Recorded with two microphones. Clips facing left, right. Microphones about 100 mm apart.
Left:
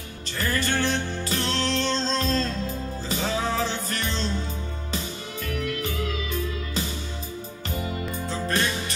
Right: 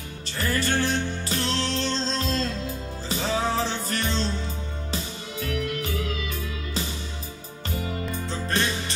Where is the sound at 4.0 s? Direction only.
35° right (ahead or behind).